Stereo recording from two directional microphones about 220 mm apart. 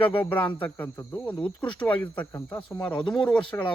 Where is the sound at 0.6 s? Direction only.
10° left (ahead or behind).